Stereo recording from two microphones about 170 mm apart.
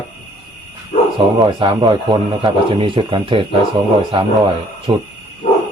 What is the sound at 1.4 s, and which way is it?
Speech, 25° right (ahead or behind).